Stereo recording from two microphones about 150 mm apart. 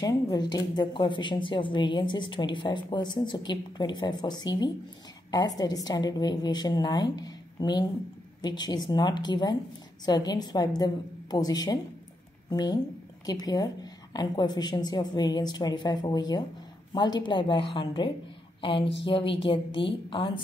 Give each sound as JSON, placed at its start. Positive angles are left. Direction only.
{"t": 0.0, "sound": "a woman's voice", "side_deg": 25}